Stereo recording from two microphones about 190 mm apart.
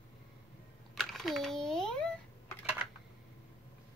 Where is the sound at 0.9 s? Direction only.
Centre (ahead or behind).